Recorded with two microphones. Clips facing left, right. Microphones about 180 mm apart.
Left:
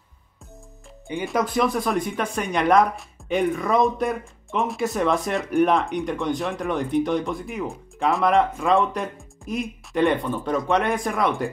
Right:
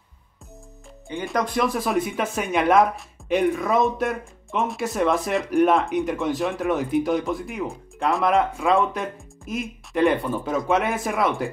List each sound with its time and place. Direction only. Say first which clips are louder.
1.2 s speech: left 1 dB; centre (ahead or behind)